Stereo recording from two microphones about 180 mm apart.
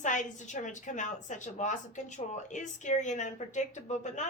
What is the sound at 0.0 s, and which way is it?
A woman's voice, 45° left (ahead or behind).